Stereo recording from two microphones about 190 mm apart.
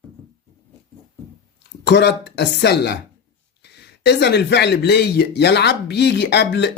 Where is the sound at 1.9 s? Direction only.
60° left (ahead or behind).